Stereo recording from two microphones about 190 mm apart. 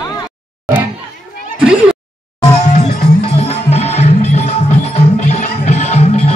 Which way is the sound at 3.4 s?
35° left (ahead or behind).